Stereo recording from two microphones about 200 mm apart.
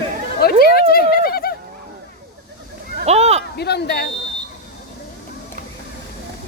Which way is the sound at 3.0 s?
30° right (ahead or behind).